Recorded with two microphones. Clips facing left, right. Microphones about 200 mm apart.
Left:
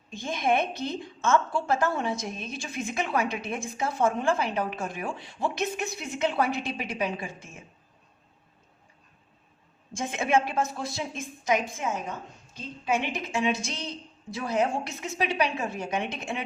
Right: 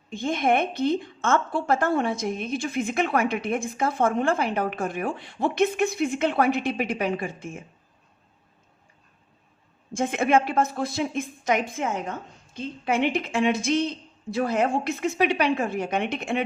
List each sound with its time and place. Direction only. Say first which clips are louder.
0.1 s a woman's voice: right 4 dB; 55° right (ahead or behind)
9.9 s a woman's voice: right 4 dB; 55° right (ahead or behind)